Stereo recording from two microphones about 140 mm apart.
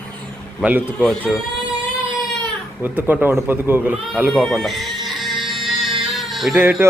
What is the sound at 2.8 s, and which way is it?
Speech, 15° right (ahead or behind).